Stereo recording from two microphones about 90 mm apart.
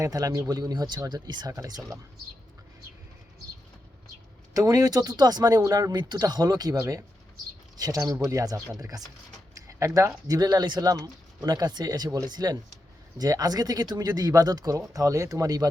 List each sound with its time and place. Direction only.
0.0 s speech: 40° right (ahead or behind)
1.5 s speech: 45° right (ahead or behind)
4.5 s speech: 40° right (ahead or behind)